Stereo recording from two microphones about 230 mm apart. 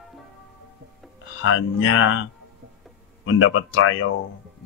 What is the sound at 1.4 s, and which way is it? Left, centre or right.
Speech, left.